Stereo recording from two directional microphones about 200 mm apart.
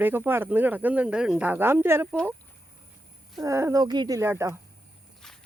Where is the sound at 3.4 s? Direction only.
15° right (ahead or behind).